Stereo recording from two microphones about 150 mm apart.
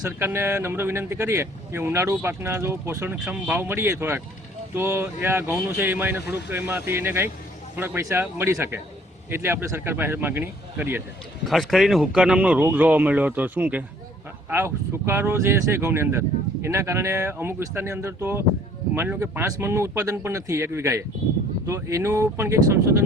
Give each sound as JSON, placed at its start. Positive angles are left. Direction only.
{"t": 0.0, "sound": "a man's voice", "side_deg": -15}
{"t": 11.4, "sound": "a man's voice", "side_deg": 0}